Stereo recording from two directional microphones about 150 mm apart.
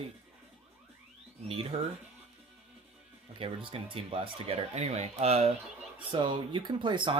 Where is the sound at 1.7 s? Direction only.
45° right (ahead or behind).